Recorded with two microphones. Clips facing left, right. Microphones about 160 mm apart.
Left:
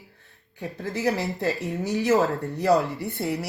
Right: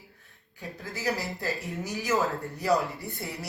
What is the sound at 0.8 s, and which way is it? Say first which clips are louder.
Speech: left 6 dB; 70° left (ahead or behind).